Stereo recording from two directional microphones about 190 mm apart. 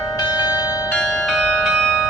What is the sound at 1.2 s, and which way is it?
Music, 5° left (ahead or behind).